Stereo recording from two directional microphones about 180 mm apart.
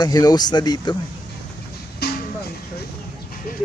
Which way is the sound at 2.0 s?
65° left (ahead or behind).